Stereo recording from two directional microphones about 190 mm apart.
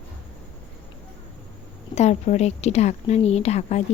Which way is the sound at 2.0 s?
35° left (ahead or behind).